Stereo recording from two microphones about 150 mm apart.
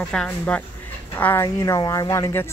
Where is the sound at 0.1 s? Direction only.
5° left (ahead or behind).